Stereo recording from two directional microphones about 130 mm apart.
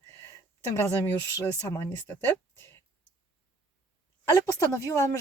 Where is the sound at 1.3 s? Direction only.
25° left (ahead or behind).